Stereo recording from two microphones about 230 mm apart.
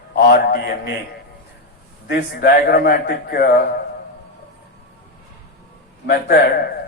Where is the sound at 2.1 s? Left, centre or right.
Left.